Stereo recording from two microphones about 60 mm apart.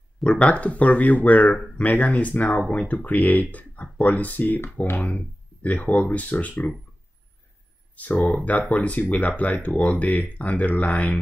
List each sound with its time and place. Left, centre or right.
0.2 s speech: centre
7.9 s speech: left